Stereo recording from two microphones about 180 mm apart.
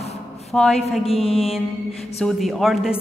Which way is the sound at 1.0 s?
30° left (ahead or behind).